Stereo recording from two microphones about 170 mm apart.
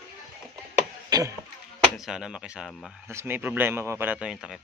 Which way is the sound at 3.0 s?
15° right (ahead or behind).